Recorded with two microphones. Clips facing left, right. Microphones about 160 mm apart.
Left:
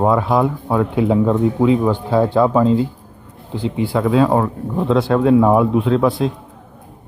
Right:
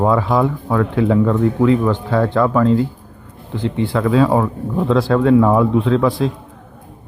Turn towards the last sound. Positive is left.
turn(degrees=5)  # may be behind; listen again after turning